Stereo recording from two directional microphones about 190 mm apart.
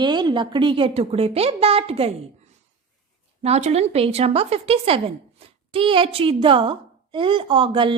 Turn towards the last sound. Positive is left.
turn(degrees=-25)  # may be behind; listen again after turning